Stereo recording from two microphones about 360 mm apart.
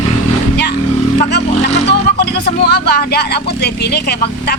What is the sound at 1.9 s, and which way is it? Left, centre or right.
Music, left.